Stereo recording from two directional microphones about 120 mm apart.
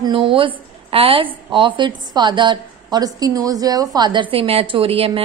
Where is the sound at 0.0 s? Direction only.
45° right (ahead or behind).